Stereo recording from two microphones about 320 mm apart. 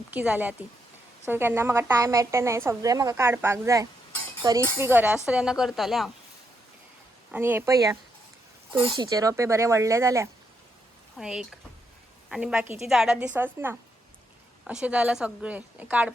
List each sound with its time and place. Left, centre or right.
0.1 s a woman's voice: centre
7.3 s a woman's voice: centre